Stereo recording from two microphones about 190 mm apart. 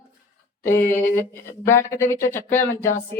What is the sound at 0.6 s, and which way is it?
Speech, 10° left (ahead or behind).